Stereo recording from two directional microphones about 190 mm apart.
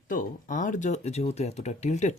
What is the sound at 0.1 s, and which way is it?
Speech, 45° left (ahead or behind).